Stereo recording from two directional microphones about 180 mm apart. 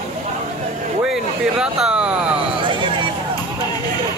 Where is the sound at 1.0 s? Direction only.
5° right (ahead or behind).